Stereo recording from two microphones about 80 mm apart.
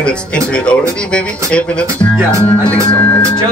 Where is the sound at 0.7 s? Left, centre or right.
Centre.